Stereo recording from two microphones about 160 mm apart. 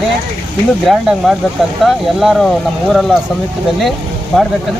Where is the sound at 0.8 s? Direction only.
Centre (ahead or behind).